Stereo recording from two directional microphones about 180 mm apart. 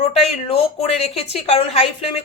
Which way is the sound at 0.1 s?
30° left (ahead or behind).